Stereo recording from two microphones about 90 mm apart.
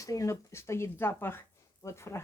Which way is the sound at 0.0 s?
40° left (ahead or behind).